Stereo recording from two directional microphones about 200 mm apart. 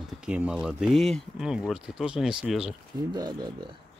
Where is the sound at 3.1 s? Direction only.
20° right (ahead or behind).